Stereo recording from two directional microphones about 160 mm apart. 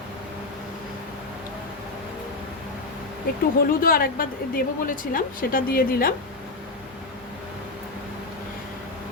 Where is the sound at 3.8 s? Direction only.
65° left (ahead or behind).